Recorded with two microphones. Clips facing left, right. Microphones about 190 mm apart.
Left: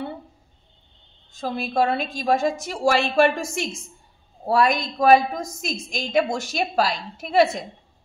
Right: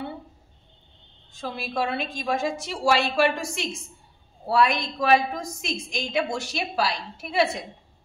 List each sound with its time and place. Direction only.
1.4 s a woman's voice: 45° left (ahead or behind)